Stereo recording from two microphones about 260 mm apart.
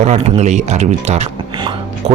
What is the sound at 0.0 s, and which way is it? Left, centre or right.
Speech, right.